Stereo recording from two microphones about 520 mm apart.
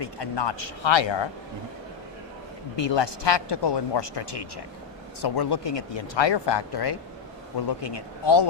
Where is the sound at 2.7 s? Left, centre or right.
Left.